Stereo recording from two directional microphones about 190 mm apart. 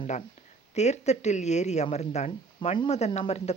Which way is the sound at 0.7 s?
35° left (ahead or behind).